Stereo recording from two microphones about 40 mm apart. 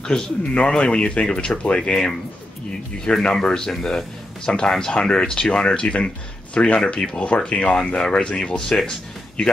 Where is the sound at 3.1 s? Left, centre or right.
Centre.